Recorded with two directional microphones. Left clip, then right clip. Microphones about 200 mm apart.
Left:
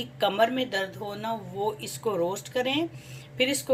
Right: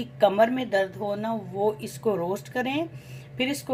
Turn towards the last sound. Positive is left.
turn(degrees=-30)  # may be behind; listen again after turning